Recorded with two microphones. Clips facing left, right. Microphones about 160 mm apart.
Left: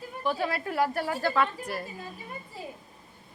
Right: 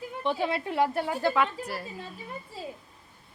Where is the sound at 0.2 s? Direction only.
25° right (ahead or behind).